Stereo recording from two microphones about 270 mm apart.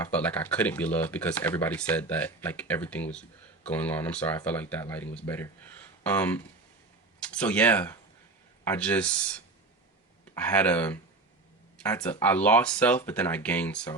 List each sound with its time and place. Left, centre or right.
0.0 s speech: centre